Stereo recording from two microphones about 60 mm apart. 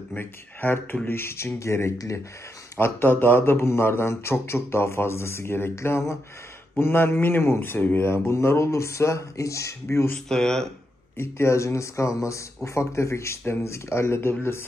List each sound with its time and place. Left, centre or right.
0.1 s speech: left
2.8 s speech: left
10.2 s speech: centre
11.1 s speech: left